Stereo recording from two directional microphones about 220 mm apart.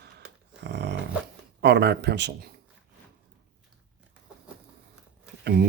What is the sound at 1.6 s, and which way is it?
Speech, 50° right (ahead or behind).